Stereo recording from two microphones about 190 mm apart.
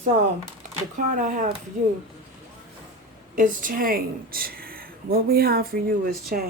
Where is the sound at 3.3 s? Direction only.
45° right (ahead or behind).